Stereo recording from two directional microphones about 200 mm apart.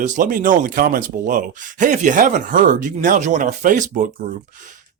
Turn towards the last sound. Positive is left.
turn(degrees=-40)  # may be behind; listen again after turning